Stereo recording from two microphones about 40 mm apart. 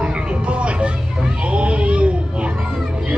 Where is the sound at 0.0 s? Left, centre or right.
Right.